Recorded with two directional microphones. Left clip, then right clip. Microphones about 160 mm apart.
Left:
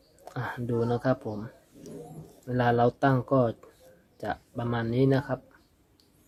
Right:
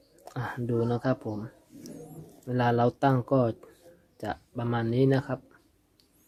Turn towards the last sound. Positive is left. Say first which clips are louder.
# even
turn(degrees=-15)  # may be behind; listen again after turning